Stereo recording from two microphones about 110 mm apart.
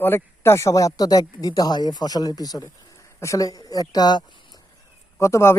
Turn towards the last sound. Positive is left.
turn(degrees=25)  # may be behind; listen again after turning